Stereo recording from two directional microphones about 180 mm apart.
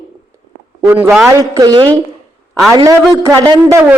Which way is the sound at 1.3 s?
20° right (ahead or behind).